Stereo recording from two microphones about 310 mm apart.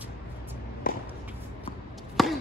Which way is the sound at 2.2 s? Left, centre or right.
Centre.